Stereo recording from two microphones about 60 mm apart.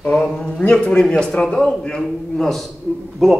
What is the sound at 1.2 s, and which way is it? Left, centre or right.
A man's voice, centre.